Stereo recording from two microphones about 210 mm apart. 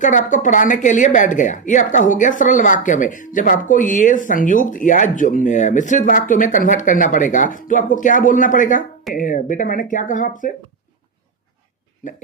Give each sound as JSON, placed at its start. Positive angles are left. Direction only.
{"t": 0.0, "sound": "speech", "side_deg": 35}